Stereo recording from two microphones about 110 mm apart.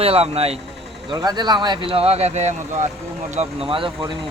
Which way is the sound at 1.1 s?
40° right (ahead or behind).